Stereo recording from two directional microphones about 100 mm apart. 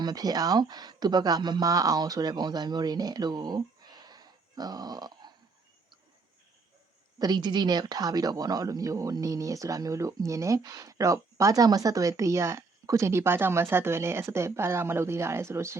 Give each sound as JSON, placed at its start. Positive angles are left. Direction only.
{"t": 0.0, "sound": "speech", "side_deg": -40}
{"t": 7.2, "sound": "speech", "side_deg": -45}